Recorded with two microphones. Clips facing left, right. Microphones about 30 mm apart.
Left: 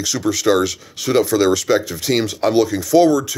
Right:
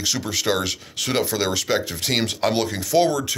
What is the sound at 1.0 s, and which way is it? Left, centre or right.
Speech, right.